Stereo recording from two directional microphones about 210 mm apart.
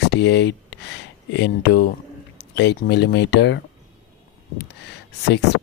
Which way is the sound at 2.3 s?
55° left (ahead or behind).